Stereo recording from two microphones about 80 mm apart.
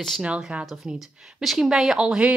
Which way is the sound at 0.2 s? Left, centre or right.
Centre.